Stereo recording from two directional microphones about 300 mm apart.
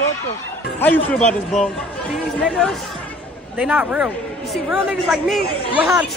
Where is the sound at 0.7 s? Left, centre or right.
Centre.